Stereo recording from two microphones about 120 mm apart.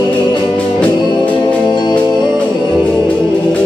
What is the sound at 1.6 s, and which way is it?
Music, 40° left (ahead or behind).